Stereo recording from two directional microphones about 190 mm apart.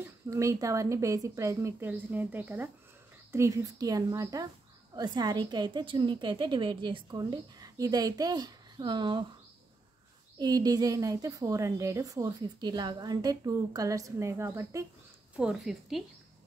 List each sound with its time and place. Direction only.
0.3 s a woman's voice: 15° right (ahead or behind)
10.4 s a woman's voice: 20° right (ahead or behind)
15.3 s a woman's voice: centre (ahead or behind)